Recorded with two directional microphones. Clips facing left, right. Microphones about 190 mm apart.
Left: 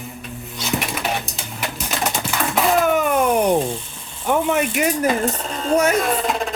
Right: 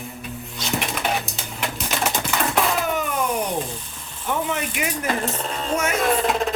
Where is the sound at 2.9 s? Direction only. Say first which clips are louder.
Left 7 dB; 60° left (ahead or behind).